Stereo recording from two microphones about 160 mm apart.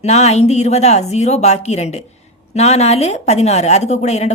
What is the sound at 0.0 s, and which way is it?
A woman's voice, 40° left (ahead or behind).